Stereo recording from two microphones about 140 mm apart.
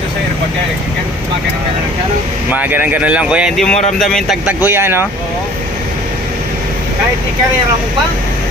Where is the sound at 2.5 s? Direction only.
15° right (ahead or behind).